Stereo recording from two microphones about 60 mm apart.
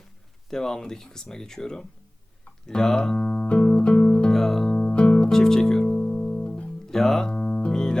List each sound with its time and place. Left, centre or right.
0.5 s speech: centre
3.4 s music: left
4.3 s music: centre
4.8 s music: centre